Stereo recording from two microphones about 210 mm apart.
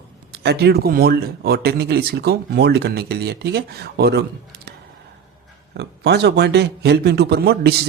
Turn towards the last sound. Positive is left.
turn(degrees=-50)  # may be behind; listen again after turning